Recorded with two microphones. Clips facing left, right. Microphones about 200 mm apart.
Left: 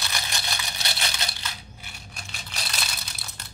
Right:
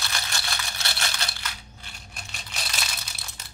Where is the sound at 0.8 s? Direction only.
20° left (ahead or behind).